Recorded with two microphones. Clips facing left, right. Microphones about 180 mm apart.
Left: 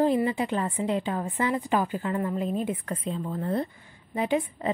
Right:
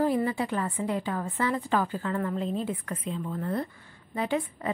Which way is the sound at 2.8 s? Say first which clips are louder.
Left 2 dB; 30° left (ahead or behind).